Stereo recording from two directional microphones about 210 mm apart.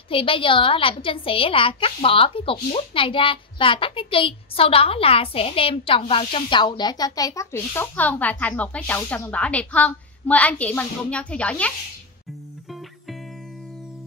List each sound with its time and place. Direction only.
0.1 s a woman's voice: 25° left (ahead or behind); by 11.7 s 5° left (ahead or behind)